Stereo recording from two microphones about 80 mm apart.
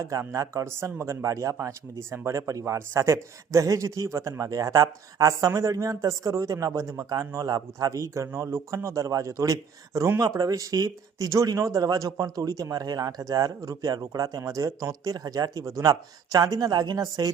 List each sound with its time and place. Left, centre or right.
0.0 s speech: right